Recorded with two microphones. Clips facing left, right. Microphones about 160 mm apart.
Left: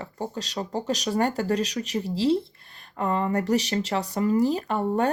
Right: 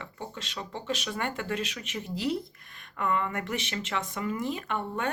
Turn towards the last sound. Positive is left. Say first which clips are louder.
# left 8 dB
turn(degrees=35)  # may be behind; listen again after turning